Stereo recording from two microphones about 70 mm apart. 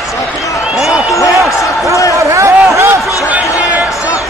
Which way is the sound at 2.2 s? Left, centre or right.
Right.